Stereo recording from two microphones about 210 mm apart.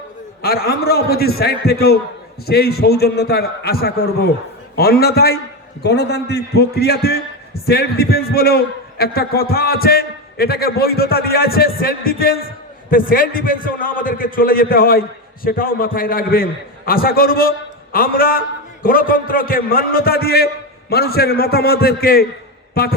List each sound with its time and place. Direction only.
0.4 s a man's voice: 45° left (ahead or behind)